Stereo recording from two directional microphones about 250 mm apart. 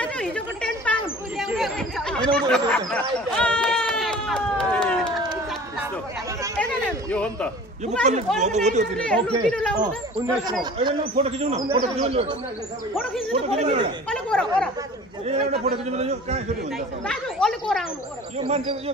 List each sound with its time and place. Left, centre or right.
0.0 s a sound: centre
1.5 s chatter: centre
2.9 s a sound: centre
6.5 s speech: centre
8.0 s speech: right
9.0 s speech: centre
10.6 s speech: centre
14.0 s speech: centre
15.2 s speech: right
17.0 s speech: centre
18.4 s speech: right